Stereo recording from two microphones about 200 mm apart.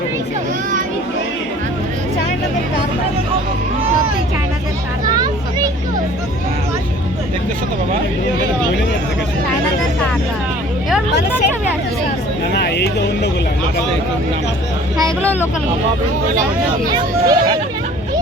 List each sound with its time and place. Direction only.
5.1 s a sound: 20° right (ahead or behind)
12.5 s speech: 55° left (ahead or behind)
14.9 s speech: 5° left (ahead or behind)
16.9 s speech: 20° right (ahead or behind)